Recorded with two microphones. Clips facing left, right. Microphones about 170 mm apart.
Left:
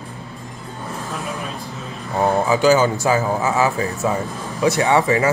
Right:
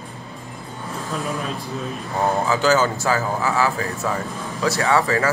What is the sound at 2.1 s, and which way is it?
Speech, 15° left (ahead or behind).